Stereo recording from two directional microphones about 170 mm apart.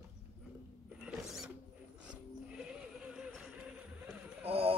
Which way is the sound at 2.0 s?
5° right (ahead or behind).